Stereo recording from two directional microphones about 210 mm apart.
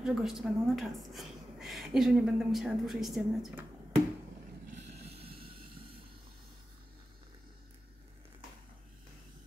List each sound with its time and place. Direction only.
0.0 s a woman's voice: centre (ahead or behind)
5.0 s train: 30° right (ahead or behind)